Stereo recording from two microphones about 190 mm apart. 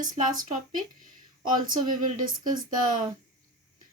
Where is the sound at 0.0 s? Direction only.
45° right (ahead or behind).